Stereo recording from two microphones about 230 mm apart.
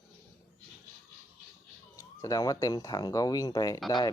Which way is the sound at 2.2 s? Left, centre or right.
Centre.